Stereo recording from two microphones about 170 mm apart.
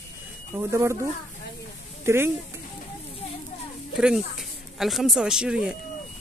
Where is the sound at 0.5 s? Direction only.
15° right (ahead or behind).